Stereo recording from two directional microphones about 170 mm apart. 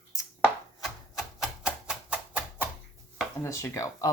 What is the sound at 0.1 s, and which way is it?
Chopping, 20° left (ahead or behind).